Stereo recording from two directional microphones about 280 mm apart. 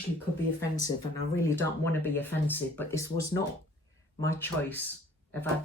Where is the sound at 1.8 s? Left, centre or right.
Centre.